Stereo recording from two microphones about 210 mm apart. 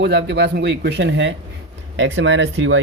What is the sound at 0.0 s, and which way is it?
Speech, 55° right (ahead or behind).